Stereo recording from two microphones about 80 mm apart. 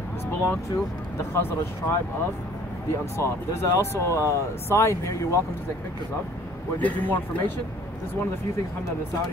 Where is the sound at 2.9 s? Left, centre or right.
Left.